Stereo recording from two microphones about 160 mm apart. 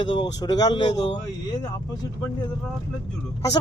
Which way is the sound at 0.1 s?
25° left (ahead or behind).